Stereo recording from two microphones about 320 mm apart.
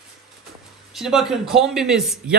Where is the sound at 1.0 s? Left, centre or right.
Centre.